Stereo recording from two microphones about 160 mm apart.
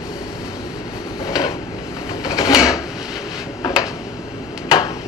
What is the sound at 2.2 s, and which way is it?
Drawer open or close, 25° left (ahead or behind).